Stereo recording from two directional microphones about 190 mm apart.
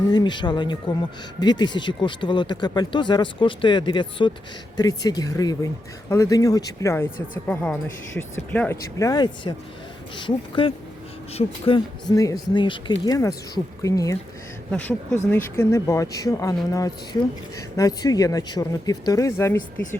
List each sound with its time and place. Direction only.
0.1 s speech: 25° left (ahead or behind)
12.1 s speech: 20° left (ahead or behind)